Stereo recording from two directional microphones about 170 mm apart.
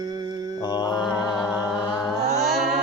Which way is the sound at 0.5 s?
25° left (ahead or behind).